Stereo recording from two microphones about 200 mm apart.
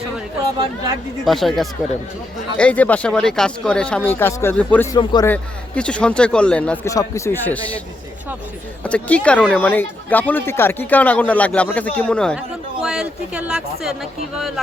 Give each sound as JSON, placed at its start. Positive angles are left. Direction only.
{"t": 1.2, "sound": "speech", "side_deg": 0}
{"t": 4.9, "sound": "a man's voice", "side_deg": 20}
{"t": 5.3, "sound": "speech", "side_deg": 5}
{"t": 8.8, "sound": "speech", "side_deg": 5}